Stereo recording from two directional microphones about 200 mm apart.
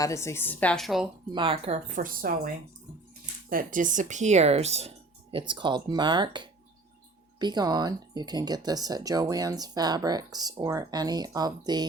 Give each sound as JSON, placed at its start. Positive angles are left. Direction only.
{"t": 0.0, "sound": "a woman's voice", "side_deg": 15}
{"t": 1.3, "sound": "speech", "side_deg": -25}
{"t": 2.0, "sound": "speech", "side_deg": -45}
{"t": 3.5, "sound": "speech", "side_deg": -45}